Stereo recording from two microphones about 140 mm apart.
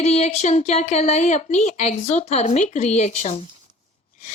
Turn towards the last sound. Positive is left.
turn(degrees=55)  # may be behind; listen again after turning